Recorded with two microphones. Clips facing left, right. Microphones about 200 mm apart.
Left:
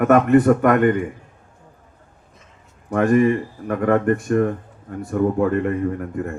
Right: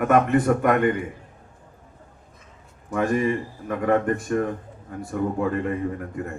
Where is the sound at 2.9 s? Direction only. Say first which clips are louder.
Left 6 dB; 55° left (ahead or behind).